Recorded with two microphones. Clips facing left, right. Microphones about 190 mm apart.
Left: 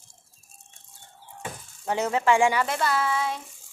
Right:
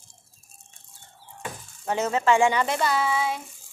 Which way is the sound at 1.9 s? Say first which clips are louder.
Right 1 dB; 15° left (ahead or behind).